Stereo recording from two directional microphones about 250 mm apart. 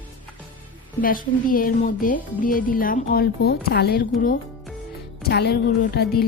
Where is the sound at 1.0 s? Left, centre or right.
Left.